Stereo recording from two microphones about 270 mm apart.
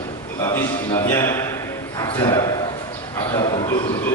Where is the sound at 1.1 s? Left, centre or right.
Centre.